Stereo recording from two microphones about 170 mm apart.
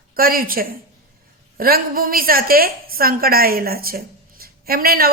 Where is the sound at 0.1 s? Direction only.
60° right (ahead or behind).